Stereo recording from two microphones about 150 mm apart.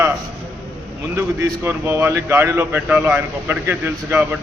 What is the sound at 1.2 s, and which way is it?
A man's voice, 20° right (ahead or behind).